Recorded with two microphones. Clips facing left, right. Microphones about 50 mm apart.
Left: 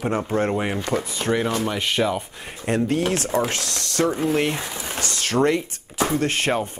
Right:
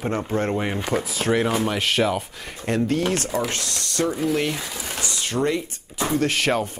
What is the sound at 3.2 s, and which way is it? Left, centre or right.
Speech, left.